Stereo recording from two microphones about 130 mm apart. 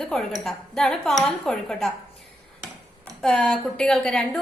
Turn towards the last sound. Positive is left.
turn(degrees=5)  # may be behind; listen again after turning